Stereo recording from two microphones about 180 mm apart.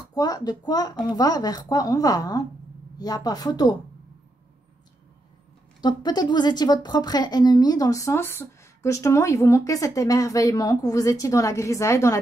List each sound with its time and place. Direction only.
0.1 s a woman's voice: 20° left (ahead or behind)
5.8 s a woman's voice: 25° left (ahead or behind)